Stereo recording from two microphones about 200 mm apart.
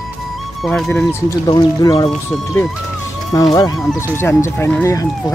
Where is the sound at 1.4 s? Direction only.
20° left (ahead or behind).